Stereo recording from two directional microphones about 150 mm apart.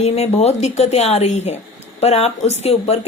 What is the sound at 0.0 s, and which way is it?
A woman's voice, 45° left (ahead or behind).